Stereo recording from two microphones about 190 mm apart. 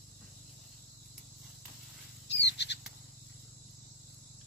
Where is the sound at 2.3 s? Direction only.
65° left (ahead or behind).